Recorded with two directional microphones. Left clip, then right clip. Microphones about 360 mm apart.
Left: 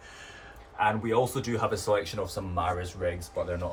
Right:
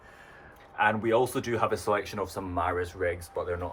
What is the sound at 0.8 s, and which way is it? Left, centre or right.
Speech, right.